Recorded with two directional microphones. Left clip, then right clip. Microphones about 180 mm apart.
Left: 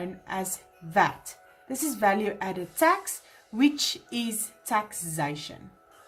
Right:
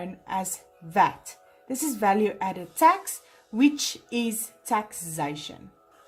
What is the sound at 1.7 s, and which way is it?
A woman's voice, 25° right (ahead or behind).